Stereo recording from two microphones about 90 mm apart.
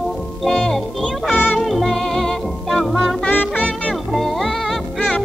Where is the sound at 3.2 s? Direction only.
15° left (ahead or behind).